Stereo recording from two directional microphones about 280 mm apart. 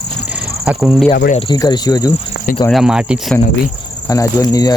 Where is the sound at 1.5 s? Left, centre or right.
Centre.